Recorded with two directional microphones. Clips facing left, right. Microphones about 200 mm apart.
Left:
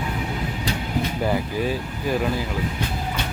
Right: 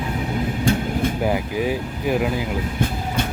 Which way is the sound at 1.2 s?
15° right (ahead or behind).